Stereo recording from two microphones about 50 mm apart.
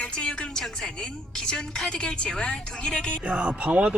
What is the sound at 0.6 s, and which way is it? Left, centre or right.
A woman's voice, centre.